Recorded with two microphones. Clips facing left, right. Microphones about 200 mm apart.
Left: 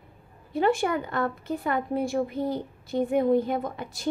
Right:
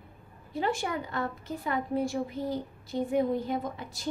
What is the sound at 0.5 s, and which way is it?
A woman's voice, 60° left (ahead or behind).